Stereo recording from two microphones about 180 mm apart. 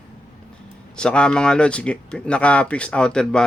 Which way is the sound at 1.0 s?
5° left (ahead or behind).